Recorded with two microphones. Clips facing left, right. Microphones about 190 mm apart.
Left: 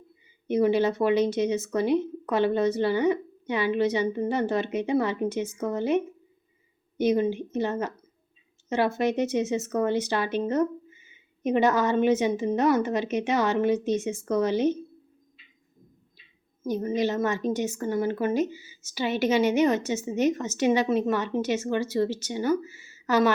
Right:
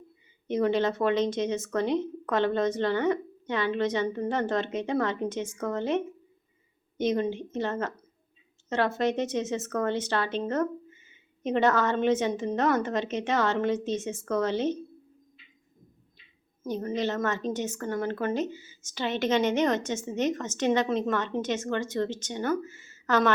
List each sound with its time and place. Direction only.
0.4 s a woman's voice: 10° left (ahead or behind)
16.6 s a woman's voice: 10° left (ahead or behind)